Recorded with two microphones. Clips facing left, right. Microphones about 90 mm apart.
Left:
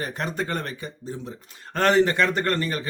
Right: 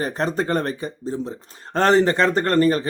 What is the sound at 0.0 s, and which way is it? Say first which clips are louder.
Speech: right 6 dB; 35° right (ahead or behind).